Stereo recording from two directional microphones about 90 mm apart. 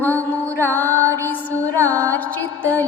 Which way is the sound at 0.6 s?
25° left (ahead or behind).